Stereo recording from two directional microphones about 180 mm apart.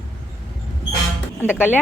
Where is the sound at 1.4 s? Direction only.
5° right (ahead or behind).